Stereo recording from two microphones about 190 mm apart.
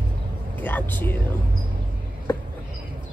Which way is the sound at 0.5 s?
10° left (ahead or behind).